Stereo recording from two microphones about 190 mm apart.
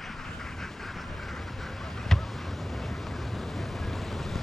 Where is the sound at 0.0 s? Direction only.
Centre (ahead or behind).